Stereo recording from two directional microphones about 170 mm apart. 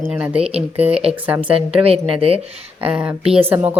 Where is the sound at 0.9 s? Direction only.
5° right (ahead or behind).